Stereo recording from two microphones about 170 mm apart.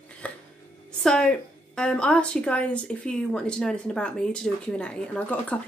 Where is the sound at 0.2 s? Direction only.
5° left (ahead or behind).